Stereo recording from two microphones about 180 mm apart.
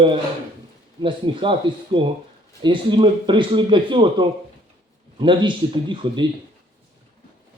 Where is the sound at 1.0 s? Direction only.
30° right (ahead or behind).